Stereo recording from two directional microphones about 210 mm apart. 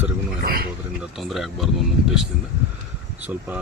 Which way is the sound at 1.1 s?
Centre (ahead or behind).